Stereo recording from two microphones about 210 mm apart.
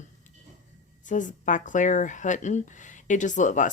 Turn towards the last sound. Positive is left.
turn(degrees=35)  # may be behind; listen again after turning